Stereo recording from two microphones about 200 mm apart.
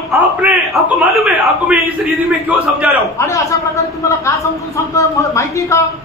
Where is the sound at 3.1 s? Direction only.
15° left (ahead or behind).